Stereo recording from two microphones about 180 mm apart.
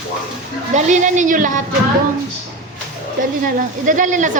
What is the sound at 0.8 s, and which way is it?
Speech, 40° right (ahead or behind).